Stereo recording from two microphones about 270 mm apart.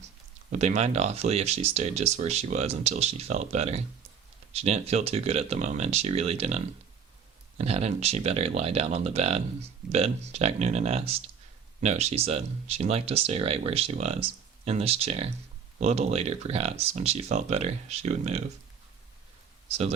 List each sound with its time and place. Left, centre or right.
0.5 s speech: right
7.6 s speech: right